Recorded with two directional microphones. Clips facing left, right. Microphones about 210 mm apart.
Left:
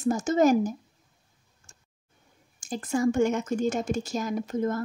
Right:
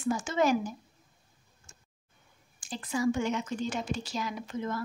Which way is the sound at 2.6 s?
45° left (ahead or behind).